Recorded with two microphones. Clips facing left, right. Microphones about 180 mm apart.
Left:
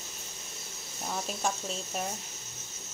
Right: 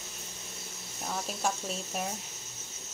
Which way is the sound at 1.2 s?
5° right (ahead or behind).